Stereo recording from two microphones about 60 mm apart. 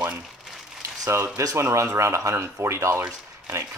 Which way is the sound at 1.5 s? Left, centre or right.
Right.